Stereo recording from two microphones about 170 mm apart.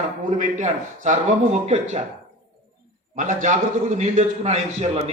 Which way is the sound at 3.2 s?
50° right (ahead or behind).